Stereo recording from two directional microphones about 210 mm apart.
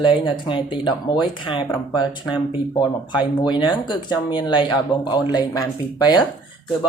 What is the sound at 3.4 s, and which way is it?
Speech, 20° left (ahead or behind).